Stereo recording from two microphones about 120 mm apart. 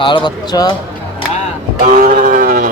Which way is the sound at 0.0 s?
35° left (ahead or behind).